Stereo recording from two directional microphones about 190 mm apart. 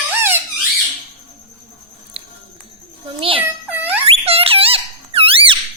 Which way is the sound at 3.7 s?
10° right (ahead or behind).